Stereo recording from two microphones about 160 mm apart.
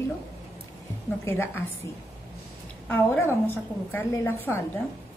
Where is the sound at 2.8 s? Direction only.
10° left (ahead or behind).